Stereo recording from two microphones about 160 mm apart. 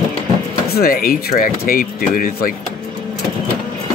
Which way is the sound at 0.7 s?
65° left (ahead or behind).